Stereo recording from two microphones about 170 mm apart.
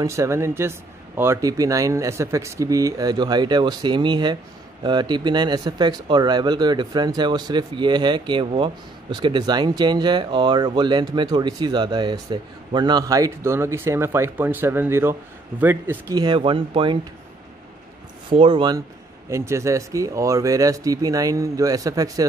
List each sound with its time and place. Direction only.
0.0 s speech: 15° right (ahead or behind)
16.2 s speech: 30° right (ahead or behind)
18.3 s speech: 30° right (ahead or behind)
19.3 s speech: 15° right (ahead or behind)